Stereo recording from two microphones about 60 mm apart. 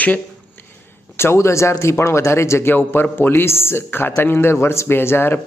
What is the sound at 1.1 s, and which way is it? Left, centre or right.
Speech, left.